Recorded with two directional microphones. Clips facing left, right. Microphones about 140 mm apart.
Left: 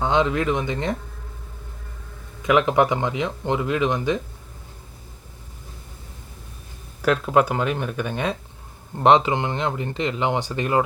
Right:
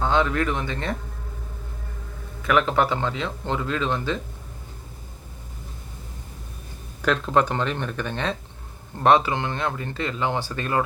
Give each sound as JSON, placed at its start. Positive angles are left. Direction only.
{"t": 0.0, "sound": "speech", "side_deg": 20}
{"t": 2.4, "sound": "speech", "side_deg": 20}
{"t": 7.0, "sound": "speech", "side_deg": 10}